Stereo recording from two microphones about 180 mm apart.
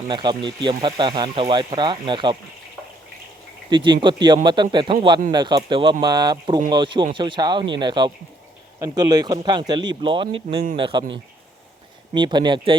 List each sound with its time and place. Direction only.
0.1 s speech: 25° right (ahead or behind)
3.7 s speech: 25° right (ahead or behind)